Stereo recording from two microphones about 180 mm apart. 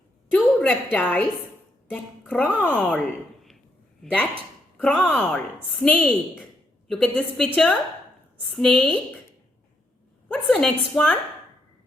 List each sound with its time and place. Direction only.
0.3 s a sound: 5° left (ahead or behind)
0.9 s a woman's voice: 10° left (ahead or behind)
4.0 s a woman's voice: 5° left (ahead or behind)
10.2 s a woman's voice: 5° left (ahead or behind)